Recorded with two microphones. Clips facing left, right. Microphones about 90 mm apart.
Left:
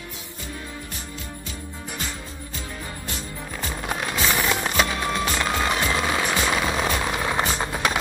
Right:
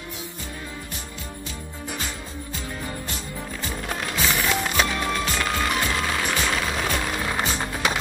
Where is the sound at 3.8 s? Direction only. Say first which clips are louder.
Left 1 dB; 20° left (ahead or behind).